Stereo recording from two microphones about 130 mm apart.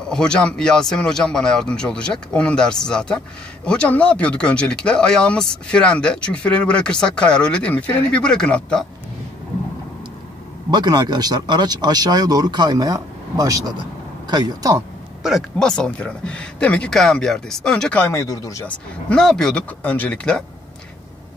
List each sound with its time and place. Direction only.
0.1 s speech: 5° left (ahead or behind)
10.7 s speech: 35° right (ahead or behind)
15.2 s speech: centre (ahead or behind)
18.0 s speech: 25° left (ahead or behind)
19.0 s speech: 5° left (ahead or behind)